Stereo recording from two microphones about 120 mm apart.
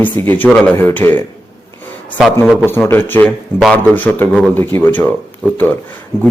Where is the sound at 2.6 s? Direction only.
15° left (ahead or behind).